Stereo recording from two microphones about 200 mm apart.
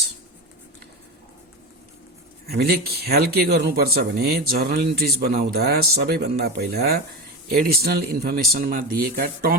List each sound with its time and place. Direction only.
2.5 s speech: 55° right (ahead or behind)